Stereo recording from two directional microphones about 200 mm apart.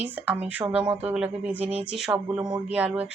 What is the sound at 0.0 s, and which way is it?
Speech, 10° right (ahead or behind).